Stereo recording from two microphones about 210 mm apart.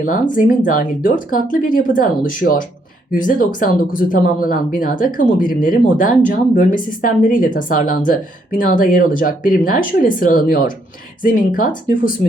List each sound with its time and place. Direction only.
0.0 s speech: 40° left (ahead or behind)